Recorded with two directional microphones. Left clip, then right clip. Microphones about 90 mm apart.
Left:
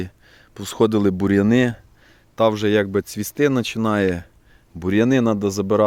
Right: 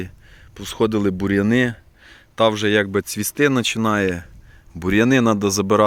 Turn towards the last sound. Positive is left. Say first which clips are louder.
# right 2 dB
turn(degrees=-10)  # may be behind; listen again after turning